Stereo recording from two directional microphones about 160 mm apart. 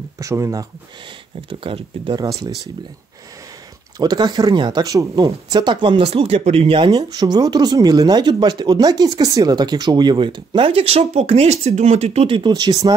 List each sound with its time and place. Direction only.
0.2 s speech: 20° right (ahead or behind)
1.5 s speech: 35° right (ahead or behind)
2.2 s speech: 20° right (ahead or behind)
4.0 s speech: 25° right (ahead or behind)
6.9 s speech: 25° right (ahead or behind)